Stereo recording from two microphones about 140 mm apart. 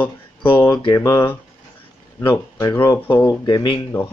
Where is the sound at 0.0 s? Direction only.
10° left (ahead or behind).